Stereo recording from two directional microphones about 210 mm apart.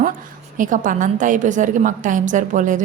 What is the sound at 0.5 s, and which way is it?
A woman's voice, 40° right (ahead or behind).